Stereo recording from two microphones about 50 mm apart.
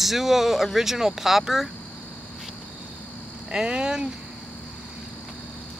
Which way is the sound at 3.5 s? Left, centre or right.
Centre.